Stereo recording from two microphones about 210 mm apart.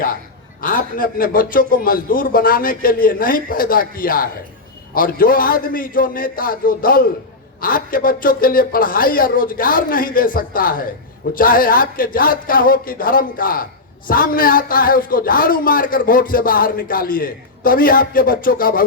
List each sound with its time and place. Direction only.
0.6 s speech: 40° left (ahead or behind)